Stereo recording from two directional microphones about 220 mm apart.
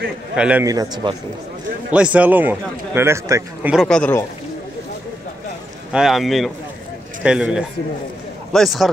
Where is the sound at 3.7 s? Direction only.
5° left (ahead or behind).